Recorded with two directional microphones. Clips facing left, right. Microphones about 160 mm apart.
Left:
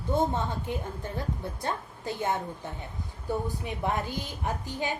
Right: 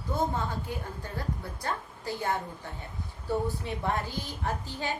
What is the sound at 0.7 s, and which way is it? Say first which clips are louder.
A woman's voice: left 3 dB; 20° left (ahead or behind).